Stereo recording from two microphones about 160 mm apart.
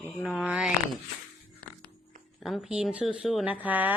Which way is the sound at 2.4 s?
Centre (ahead or behind).